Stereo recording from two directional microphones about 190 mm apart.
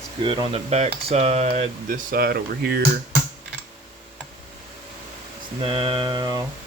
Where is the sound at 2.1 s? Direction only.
55° right (ahead or behind).